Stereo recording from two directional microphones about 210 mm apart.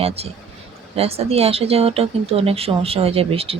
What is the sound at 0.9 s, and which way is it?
Speech, 30° right (ahead or behind).